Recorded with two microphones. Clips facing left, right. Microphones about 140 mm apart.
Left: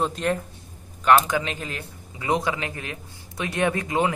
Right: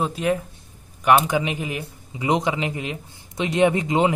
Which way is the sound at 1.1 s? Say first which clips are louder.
Right 1 dB; 15° right (ahead or behind).